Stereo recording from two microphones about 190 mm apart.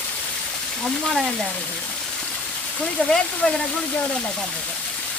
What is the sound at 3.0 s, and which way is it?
Speech, 5° left (ahead or behind).